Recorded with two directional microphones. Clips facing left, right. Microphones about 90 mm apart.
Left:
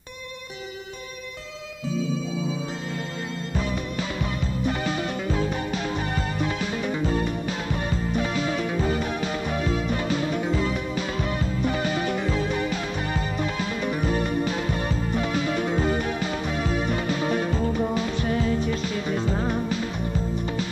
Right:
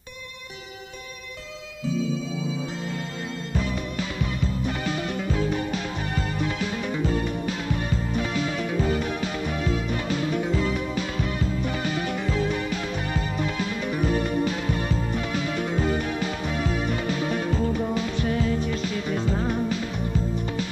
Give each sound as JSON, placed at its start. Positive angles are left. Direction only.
{"t": 3.5, "sound": "music", "side_deg": 30}
{"t": 7.1, "sound": "music", "side_deg": 30}